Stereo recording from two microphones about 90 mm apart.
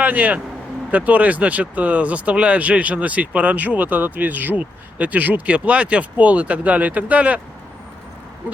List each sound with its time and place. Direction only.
0.0 s a man's voice: 15° right (ahead or behind)